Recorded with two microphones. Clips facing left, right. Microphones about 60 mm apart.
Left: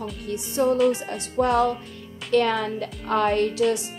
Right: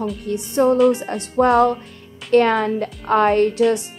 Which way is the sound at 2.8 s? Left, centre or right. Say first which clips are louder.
Right 6 dB; right.